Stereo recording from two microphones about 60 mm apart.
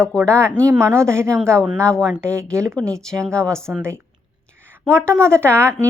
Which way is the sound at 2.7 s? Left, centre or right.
Centre.